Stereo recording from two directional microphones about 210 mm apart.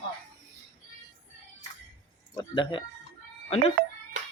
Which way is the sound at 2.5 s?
20° left (ahead or behind).